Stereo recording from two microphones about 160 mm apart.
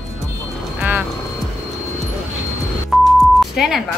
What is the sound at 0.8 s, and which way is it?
Music, 10° right (ahead or behind).